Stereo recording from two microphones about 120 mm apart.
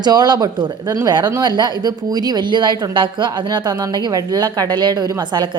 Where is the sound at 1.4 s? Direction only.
35° right (ahead or behind).